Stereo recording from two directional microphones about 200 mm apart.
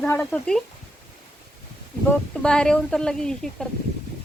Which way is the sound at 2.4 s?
5° left (ahead or behind).